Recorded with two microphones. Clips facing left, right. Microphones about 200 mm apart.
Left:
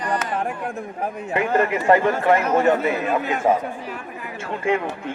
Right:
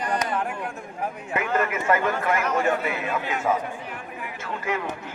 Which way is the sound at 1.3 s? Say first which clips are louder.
Left 5 dB; 30° left (ahead or behind).